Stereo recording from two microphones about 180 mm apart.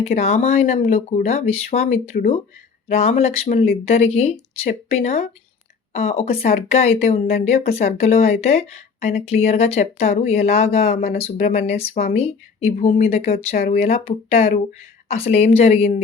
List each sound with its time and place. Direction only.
0.2 s speech: 35° left (ahead or behind)
2.1 s speech: 50° left (ahead or behind)
2.9 s speech: 35° left (ahead or behind)
10.9 s speech: 55° left (ahead or behind)
11.2 s speech: 40° left (ahead or behind)
13.5 s speech: 50° left (ahead or behind)
13.7 s speech: 35° left (ahead or behind)